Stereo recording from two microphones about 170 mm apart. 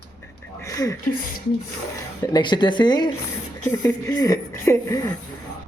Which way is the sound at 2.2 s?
25° left (ahead or behind).